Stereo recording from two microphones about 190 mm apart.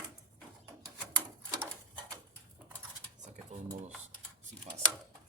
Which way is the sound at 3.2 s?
40° right (ahead or behind).